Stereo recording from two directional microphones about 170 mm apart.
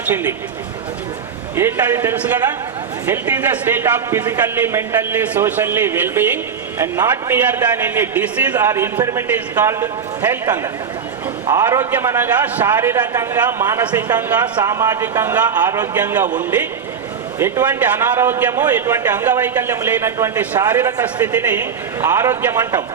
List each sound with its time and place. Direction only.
0.1 s speech: 10° right (ahead or behind)
1.5 s speech: 15° right (ahead or behind)
17.4 s speech: 10° right (ahead or behind)